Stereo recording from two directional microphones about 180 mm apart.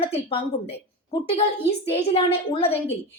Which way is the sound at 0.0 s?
35° left (ahead or behind).